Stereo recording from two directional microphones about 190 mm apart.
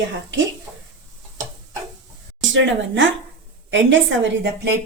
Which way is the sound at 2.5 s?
80° right.